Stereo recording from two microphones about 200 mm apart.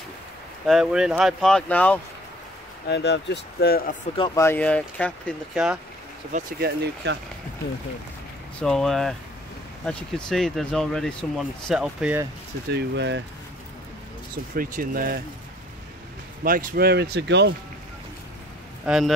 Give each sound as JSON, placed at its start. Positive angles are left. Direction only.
{"t": 0.7, "sound": "speech", "side_deg": -5}
{"t": 2.9, "sound": "speech", "side_deg": 60}
{"t": 4.2, "sound": "speech", "side_deg": 15}
{"t": 6.3, "sound": "speech", "side_deg": -50}
{"t": 8.5, "sound": "speech", "side_deg": 0}
{"t": 12.7, "sound": "speech", "side_deg": -60}
{"t": 14.5, "sound": "speech", "side_deg": -45}
{"t": 16.4, "sound": "speech", "side_deg": -45}
{"t": 18.9, "sound": "speech", "side_deg": 0}